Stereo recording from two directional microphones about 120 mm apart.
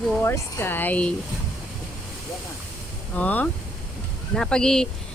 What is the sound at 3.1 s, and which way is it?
Speech, 15° left (ahead or behind).